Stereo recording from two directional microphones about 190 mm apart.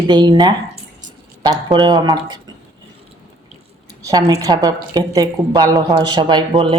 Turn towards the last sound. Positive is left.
turn(degrees=-25)  # may be behind; listen again after turning